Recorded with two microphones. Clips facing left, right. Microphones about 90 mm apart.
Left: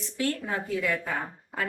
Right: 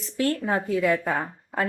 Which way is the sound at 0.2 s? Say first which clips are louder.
Right 5 dB; 45° right (ahead or behind).